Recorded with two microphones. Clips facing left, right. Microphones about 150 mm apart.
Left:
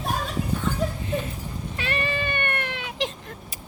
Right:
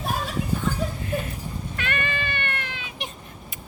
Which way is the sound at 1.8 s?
30° left (ahead or behind).